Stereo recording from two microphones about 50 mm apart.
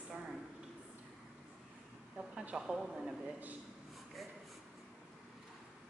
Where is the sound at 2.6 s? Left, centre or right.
Centre.